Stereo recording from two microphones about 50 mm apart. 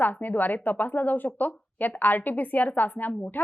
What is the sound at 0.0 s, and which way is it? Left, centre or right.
Speech, left.